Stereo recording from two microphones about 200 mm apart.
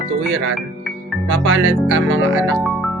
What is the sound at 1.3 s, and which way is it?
Speech, 70° right (ahead or behind).